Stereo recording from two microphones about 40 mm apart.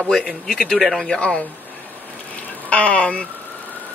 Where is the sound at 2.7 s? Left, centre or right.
Left.